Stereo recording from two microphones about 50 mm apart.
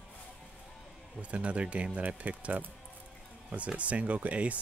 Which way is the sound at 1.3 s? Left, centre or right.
Right.